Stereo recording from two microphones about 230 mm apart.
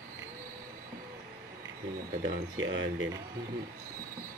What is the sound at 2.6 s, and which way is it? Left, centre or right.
Speech, right.